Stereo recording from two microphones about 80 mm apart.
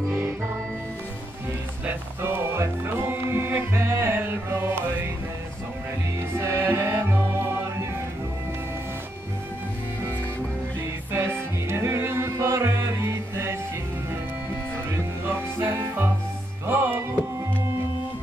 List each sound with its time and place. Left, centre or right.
1.9 s music: right
6.3 s music: right
11.1 s music: right
15.2 s music: right